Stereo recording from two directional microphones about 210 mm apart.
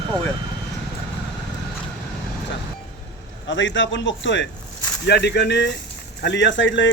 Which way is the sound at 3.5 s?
60° left (ahead or behind).